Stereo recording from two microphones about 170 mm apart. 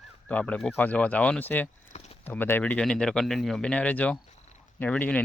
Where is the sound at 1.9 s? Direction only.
40° left (ahead or behind).